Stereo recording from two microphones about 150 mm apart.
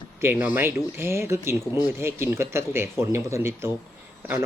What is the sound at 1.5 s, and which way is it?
Speech, 25° left (ahead or behind).